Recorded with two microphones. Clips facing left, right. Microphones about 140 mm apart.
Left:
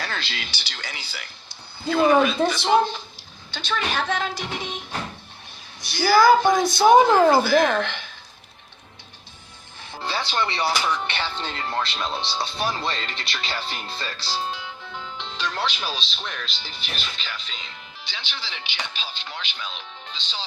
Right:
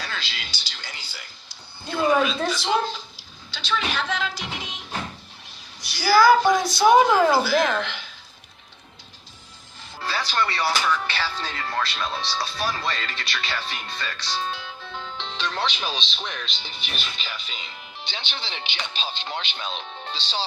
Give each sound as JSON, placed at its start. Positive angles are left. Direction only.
{"t": 0.0, "sound": "a sound", "side_deg": 55}
{"t": 2.5, "sound": "speech", "side_deg": 55}
{"t": 5.8, "sound": "a woman's voice", "side_deg": 55}
{"t": 10.0, "sound": "speech", "side_deg": 25}
{"t": 14.9, "sound": "speech", "side_deg": 10}
{"t": 18.0, "sound": "speech", "side_deg": -25}